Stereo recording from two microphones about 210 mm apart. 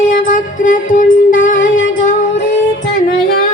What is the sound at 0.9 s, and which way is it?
Music, 40° left (ahead or behind).